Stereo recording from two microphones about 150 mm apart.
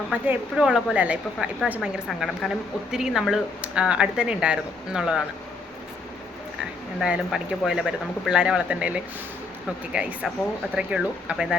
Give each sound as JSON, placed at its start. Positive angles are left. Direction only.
{"t": 0.1, "sound": "a woman's voice", "side_deg": -5}
{"t": 7.0, "sound": "a woman's voice", "side_deg": -5}